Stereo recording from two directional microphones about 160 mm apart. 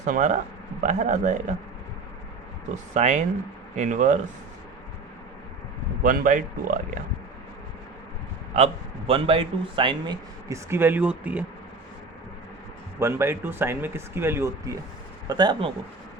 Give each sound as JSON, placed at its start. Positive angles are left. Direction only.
{"t": 0.0, "sound": "speech", "side_deg": -50}
{"t": 2.7, "sound": "speech", "side_deg": -45}
{"t": 6.0, "sound": "speech", "side_deg": -55}
{"t": 8.5, "sound": "a man's voice", "side_deg": -40}
{"t": 10.5, "sound": "speech", "side_deg": -15}
{"t": 13.0, "sound": "speech", "side_deg": -15}